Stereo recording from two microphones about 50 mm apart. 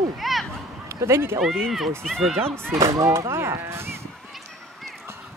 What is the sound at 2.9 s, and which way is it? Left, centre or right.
Speech, right.